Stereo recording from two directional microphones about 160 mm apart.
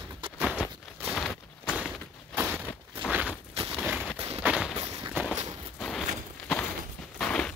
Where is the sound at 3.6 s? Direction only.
40° right (ahead or behind).